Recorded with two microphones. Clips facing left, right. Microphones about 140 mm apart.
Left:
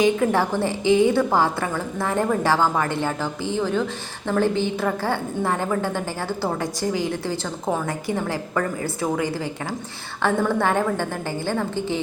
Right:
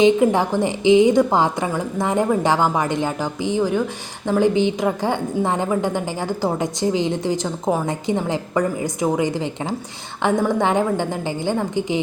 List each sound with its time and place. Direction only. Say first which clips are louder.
0.0 s a woman's voice: right 4 dB; 15° right (ahead or behind)